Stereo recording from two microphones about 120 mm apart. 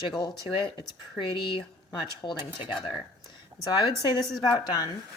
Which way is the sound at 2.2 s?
40° left (ahead or behind).